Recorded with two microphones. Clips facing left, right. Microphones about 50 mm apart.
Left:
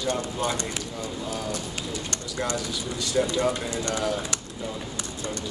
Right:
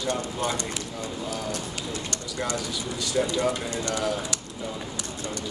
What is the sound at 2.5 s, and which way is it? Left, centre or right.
Speech, centre.